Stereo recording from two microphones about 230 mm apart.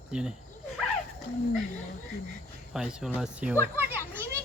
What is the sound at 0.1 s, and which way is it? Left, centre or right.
Speech, centre.